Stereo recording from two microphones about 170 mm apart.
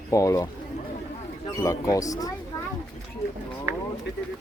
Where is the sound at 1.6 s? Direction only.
20° left (ahead or behind).